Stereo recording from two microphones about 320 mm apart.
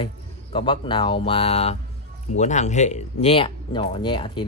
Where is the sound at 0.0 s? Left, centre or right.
Centre.